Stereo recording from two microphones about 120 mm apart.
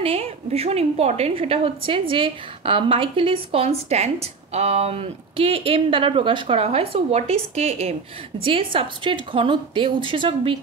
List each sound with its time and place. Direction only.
0.0 s a woman's voice: 55° right (ahead or behind)
8.5 s a woman's voice: 50° right (ahead or behind)